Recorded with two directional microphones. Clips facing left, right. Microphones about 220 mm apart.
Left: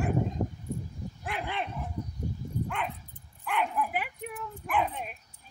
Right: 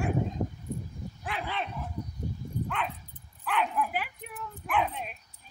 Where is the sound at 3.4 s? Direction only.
10° left (ahead or behind).